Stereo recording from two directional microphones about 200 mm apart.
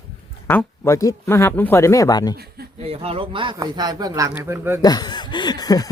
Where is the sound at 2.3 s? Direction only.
50° right (ahead or behind).